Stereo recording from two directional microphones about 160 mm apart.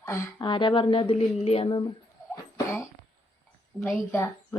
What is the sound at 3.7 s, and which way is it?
Speech, 20° left (ahead or behind).